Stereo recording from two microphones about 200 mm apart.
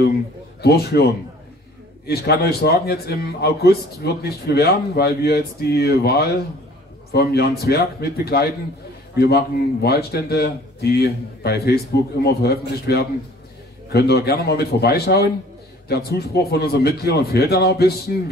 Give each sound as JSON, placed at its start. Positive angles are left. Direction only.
{"t": 0.6, "sound": "a man's voice", "side_deg": 55}
{"t": 2.0, "sound": "a man's voice", "side_deg": 50}